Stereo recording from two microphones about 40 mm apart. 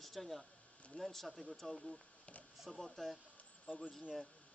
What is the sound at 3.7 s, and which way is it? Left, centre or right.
Speech, left.